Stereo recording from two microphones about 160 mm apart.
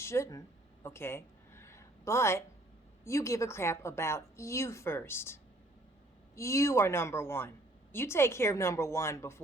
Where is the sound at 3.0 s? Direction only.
20° left (ahead or behind).